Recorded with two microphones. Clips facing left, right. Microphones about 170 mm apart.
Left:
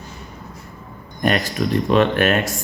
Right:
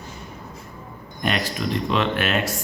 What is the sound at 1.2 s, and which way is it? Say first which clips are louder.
Speech: left 5 dB; 50° left (ahead or behind).